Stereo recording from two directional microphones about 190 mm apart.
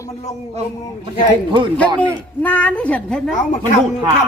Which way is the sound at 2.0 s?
10° left (ahead or behind).